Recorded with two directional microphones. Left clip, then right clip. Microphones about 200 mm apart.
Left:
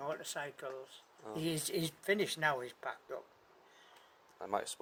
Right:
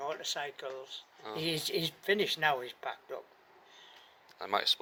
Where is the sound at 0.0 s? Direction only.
60° left (ahead or behind).